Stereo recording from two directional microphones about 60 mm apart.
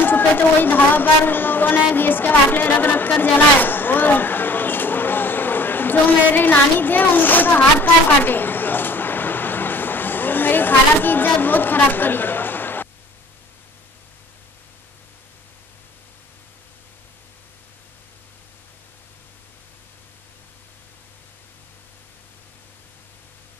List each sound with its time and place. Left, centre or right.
0.0 s a woman's voice: left
3.6 s a sound: left
11.4 s chatter: left